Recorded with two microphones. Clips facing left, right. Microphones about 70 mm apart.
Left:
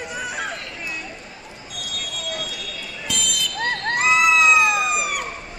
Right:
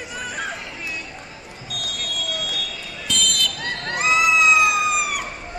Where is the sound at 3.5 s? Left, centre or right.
Left.